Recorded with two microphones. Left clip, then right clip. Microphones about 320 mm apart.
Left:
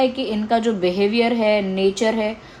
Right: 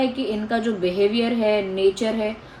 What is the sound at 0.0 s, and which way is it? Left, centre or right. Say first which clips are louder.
A woman's voice: left 3 dB; centre.